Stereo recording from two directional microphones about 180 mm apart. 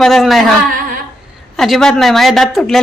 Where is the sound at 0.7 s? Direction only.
50° right (ahead or behind).